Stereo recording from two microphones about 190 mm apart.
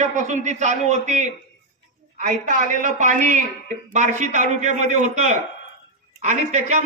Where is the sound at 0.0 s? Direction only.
40° right (ahead or behind).